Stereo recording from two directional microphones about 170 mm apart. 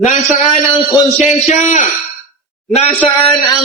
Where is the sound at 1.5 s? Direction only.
45° left (ahead or behind).